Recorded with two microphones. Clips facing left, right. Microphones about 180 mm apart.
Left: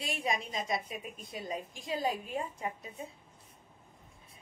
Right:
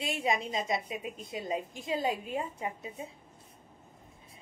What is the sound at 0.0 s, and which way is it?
A woman's voice, 25° right (ahead or behind).